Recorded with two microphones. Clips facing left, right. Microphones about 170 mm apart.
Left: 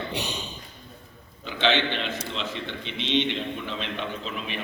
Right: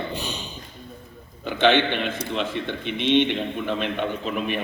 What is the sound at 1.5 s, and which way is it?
A man's voice, 55° right (ahead or behind).